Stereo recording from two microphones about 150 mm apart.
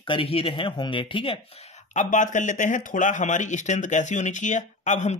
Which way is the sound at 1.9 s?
55° left (ahead or behind).